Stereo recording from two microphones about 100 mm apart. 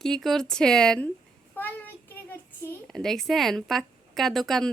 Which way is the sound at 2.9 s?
Centre (ahead or behind).